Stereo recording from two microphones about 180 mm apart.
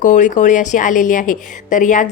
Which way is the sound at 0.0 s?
45° left (ahead or behind).